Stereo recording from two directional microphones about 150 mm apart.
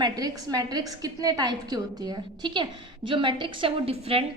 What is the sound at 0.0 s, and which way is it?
A woman's voice, 25° right (ahead or behind).